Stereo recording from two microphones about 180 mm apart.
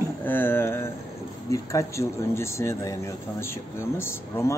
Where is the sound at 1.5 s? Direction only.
15° left (ahead or behind).